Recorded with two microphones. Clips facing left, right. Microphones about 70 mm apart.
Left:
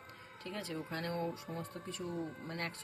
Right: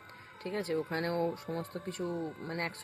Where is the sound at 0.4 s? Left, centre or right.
Right.